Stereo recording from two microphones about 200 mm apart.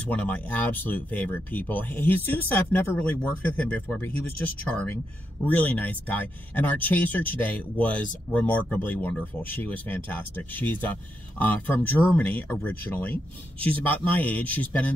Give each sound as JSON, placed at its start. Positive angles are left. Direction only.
{"t": 0.0, "sound": "speech", "side_deg": 5}